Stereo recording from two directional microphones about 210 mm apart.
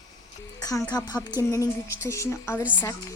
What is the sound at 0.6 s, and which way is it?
Speech, 15° left (ahead or behind).